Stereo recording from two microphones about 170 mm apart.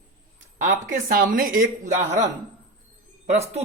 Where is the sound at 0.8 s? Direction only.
55° right (ahead or behind).